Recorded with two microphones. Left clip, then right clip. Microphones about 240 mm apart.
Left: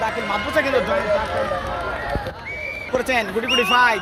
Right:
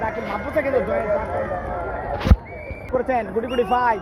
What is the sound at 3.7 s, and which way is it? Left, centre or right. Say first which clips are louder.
Speech: left 3 dB; left.